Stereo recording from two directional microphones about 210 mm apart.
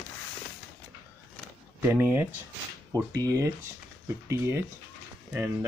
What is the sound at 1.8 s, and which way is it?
Speech, 10° right (ahead or behind).